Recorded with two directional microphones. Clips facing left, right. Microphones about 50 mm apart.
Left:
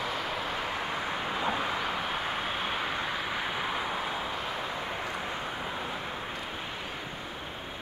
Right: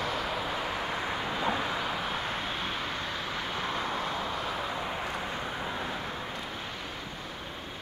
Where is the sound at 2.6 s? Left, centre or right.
Centre.